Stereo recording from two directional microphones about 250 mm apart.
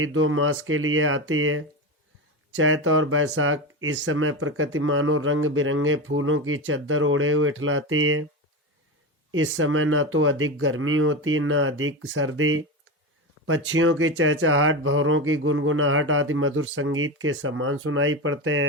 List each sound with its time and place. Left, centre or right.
0.0 s speech: right
9.3 s speech: right